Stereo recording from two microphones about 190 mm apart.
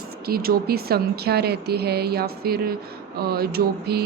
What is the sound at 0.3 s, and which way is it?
Speech, 50° right (ahead or behind).